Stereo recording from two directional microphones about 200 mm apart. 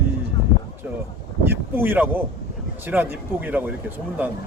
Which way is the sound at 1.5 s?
10° right (ahead or behind).